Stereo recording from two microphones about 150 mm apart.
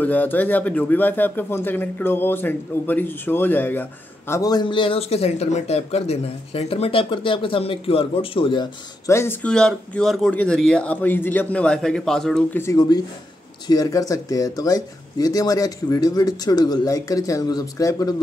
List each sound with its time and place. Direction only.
0.0 s speech: 10° left (ahead or behind)
4.3 s speech: 25° left (ahead or behind)
9.1 s speech: 15° left (ahead or behind)
12.5 s speech: 20° left (ahead or behind)